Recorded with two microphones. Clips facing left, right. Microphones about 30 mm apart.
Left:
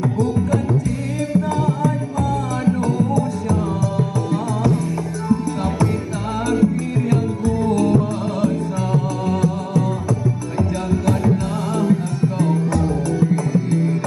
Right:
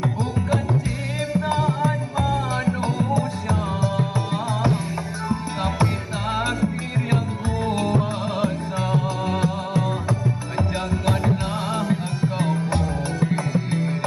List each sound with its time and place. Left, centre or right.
0.0 s music: right
6.6 s music: right